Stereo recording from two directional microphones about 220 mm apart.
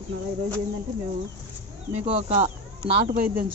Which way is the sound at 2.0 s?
25° right (ahead or behind).